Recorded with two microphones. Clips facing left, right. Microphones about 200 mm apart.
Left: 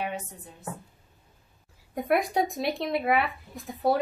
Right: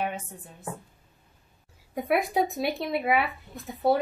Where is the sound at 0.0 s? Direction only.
50° right (ahead or behind).